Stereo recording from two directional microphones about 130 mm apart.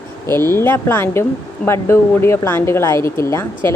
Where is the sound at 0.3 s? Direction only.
20° left (ahead or behind).